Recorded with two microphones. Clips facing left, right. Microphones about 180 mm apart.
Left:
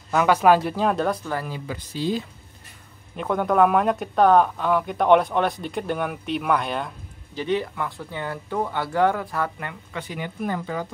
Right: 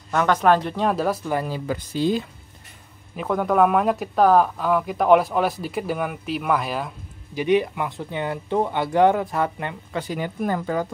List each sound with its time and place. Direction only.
0.1 s speech: 10° left (ahead or behind)
1.5 s speech: 50° right (ahead or behind)
3.2 s speech: centre (ahead or behind)
7.3 s speech: 15° right (ahead or behind)
9.9 s speech: 40° right (ahead or behind)